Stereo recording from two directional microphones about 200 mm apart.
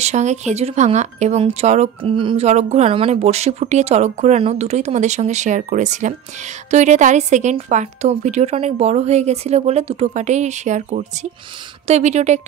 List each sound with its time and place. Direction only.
0.0 s speech: 35° right (ahead or behind)